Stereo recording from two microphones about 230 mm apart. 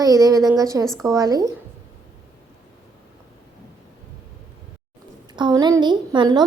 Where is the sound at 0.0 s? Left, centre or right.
Centre.